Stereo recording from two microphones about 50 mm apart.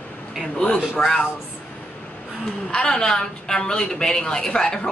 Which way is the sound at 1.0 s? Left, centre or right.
Left.